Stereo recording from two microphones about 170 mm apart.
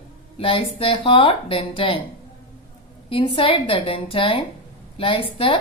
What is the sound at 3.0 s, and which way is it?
Speech, 30° left (ahead or behind).